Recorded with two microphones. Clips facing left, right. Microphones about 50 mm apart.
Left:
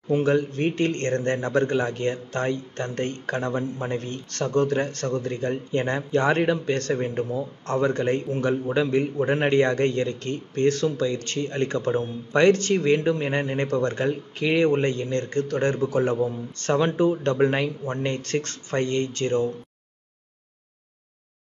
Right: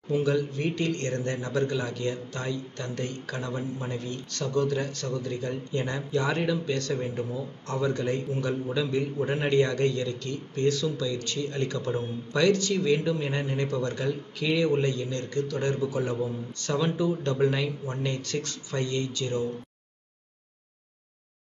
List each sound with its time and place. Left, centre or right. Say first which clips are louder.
0.1 s speech: left 4 dB; left